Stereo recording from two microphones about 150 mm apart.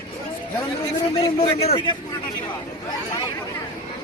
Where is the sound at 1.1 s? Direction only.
40° left (ahead or behind).